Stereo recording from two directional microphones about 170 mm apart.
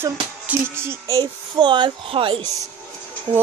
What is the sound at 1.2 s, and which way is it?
Speech, 25° right (ahead or behind).